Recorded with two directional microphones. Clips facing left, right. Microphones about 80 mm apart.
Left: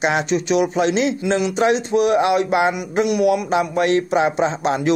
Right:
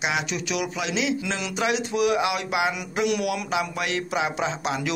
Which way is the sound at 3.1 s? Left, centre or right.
Left.